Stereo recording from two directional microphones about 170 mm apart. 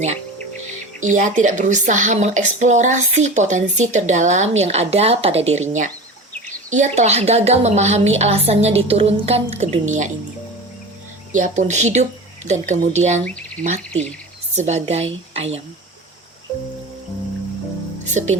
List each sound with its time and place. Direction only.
0.9 s a woman's voice: 45° right (ahead or behind)
11.3 s speech: 45° right (ahead or behind)
14.5 s a woman's voice: 40° right (ahead or behind)
18.1 s speech: 45° right (ahead or behind)